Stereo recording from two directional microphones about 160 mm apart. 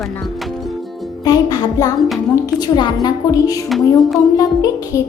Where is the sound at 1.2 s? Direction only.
25° left (ahead or behind).